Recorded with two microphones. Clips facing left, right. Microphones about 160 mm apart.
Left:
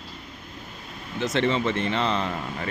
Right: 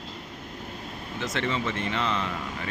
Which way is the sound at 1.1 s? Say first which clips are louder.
Left 6 dB; 25° left (ahead or behind).